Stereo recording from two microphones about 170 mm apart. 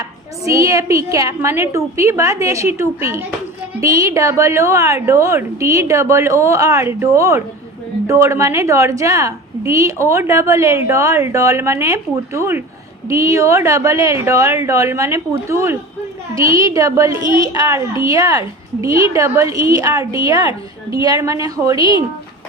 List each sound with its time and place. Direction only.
0.4 s a woman's voice: 20° right (ahead or behind)
21.8 s speech: 30° left (ahead or behind)